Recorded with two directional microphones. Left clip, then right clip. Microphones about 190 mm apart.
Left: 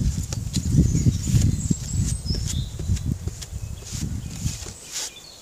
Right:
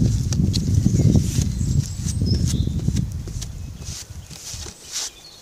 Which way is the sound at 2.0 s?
50° right (ahead or behind).